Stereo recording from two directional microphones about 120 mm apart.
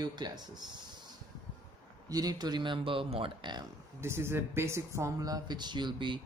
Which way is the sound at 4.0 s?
20° right (ahead or behind).